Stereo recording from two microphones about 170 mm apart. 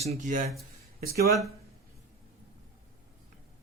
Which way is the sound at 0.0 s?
45° right (ahead or behind).